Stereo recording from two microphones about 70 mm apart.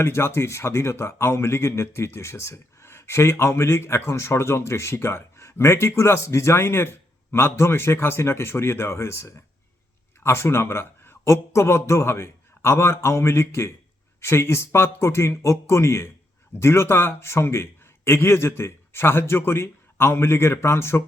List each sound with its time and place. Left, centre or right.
0.0 s a man's voice: left